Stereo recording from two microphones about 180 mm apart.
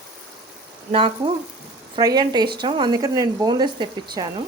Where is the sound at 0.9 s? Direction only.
30° right (ahead or behind).